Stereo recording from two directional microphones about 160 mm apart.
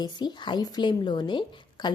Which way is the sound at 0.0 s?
25° left (ahead or behind).